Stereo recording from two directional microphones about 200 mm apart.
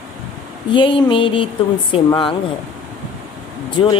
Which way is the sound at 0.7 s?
25° left (ahead or behind).